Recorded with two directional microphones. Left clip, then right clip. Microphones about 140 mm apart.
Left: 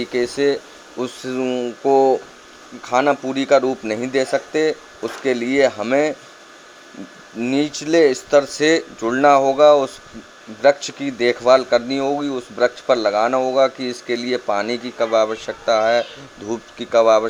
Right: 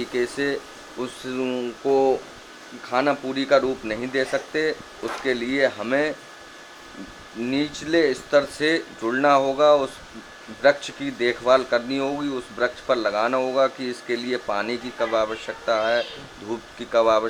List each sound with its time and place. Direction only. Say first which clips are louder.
0.0 s speech: left 6 dB; 45° left (ahead or behind)
7.4 s speech: left 5 dB; 45° left (ahead or behind)